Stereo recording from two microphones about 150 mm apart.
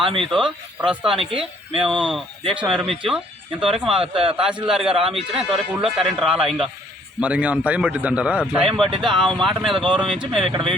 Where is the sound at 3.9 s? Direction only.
40° right (ahead or behind).